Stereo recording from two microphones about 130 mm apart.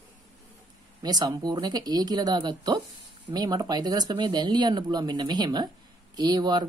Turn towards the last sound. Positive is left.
turn(degrees=-35)  # may be behind; listen again after turning